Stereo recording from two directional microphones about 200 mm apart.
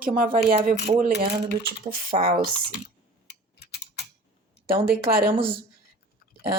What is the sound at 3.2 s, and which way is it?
Mechanisms, 55° left (ahead or behind).